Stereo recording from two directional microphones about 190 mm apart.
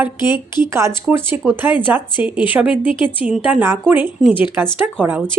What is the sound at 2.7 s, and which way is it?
Speech, 30° left (ahead or behind).